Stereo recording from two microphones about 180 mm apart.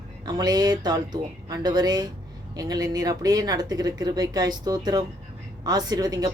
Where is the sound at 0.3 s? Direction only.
20° right (ahead or behind).